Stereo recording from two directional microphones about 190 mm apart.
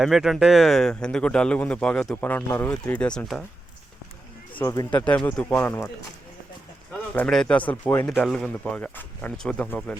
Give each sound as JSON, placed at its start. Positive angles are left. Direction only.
{"t": 0.0, "sound": "speech", "side_deg": 0}
{"t": 4.5, "sound": "speech", "side_deg": 20}
{"t": 5.0, "sound": "speech", "side_deg": 5}
{"t": 7.1, "sound": "speech", "side_deg": 5}